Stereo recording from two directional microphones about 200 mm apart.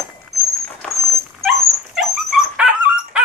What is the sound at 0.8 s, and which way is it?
Dog, centre (ahead or behind).